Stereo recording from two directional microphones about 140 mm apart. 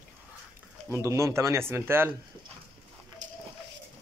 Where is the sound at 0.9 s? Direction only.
20° right (ahead or behind).